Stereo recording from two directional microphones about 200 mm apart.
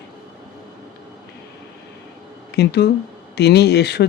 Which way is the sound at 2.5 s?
55° left (ahead or behind).